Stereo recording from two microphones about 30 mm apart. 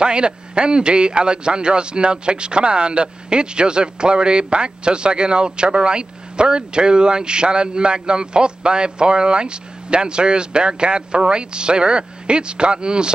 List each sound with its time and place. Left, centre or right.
0.0 s a man's voice: right